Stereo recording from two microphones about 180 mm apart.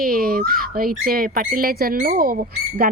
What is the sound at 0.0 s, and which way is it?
Speech, 55° right (ahead or behind).